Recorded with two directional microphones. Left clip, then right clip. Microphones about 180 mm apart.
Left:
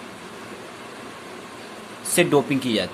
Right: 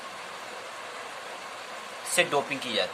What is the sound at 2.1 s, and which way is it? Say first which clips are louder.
Speech: left 6 dB; 20° left (ahead or behind).